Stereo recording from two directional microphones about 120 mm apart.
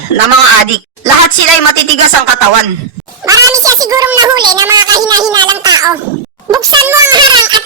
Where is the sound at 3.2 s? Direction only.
25° right (ahead or behind).